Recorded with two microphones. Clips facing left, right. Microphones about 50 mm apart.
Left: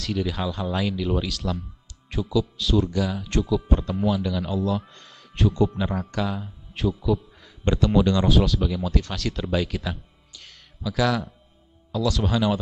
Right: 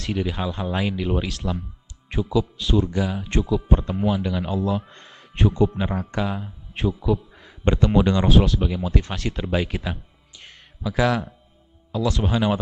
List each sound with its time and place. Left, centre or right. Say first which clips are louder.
0.0 s a man's voice: right 1 dB; centre
8.3 s speech: right 2 dB; centre
8.7 s a man's voice: right 1 dB; centre
10.4 s a sound: right 2 dB; right
11.9 s a man's voice: right 1 dB; right